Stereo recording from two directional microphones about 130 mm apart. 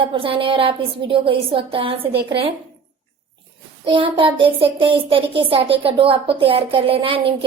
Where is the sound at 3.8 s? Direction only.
40° right (ahead or behind).